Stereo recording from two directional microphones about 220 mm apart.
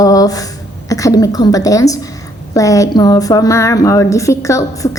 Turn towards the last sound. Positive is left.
turn(degrees=15)  # may be behind; listen again after turning